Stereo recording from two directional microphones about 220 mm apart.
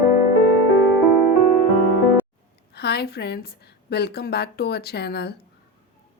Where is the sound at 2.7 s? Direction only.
50° left (ahead or behind).